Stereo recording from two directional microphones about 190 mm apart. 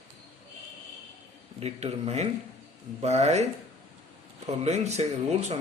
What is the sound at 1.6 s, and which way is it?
A man's voice, 35° right (ahead or behind).